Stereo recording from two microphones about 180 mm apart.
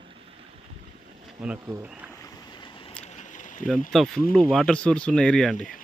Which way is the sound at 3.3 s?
45° left (ahead or behind).